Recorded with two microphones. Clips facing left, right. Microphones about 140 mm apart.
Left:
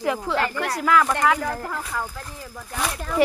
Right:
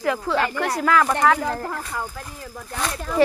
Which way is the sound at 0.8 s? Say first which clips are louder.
Right 1 dB; 5° left (ahead or behind).